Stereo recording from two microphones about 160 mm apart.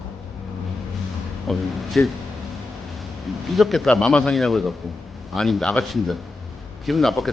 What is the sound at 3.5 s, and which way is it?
A man's voice, centre (ahead or behind).